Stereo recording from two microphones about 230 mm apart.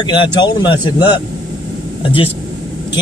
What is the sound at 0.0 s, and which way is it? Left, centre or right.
Speech, centre.